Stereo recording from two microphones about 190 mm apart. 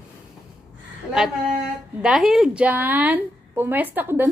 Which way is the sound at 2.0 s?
5° right (ahead or behind).